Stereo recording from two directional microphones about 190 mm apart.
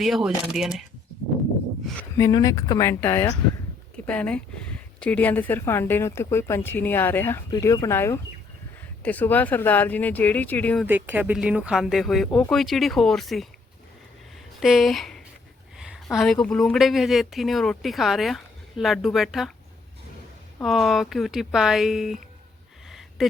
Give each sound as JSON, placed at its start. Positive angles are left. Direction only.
{"t": 0.0, "sound": "speech", "side_deg": 0}
{"t": 2.0, "sound": "speech", "side_deg": 15}
{"t": 10.8, "sound": "speech", "side_deg": -10}
{"t": 14.6, "sound": "speech", "side_deg": 0}
{"t": 20.6, "sound": "speech", "side_deg": 0}
{"t": 22.9, "sound": "a sound", "side_deg": 0}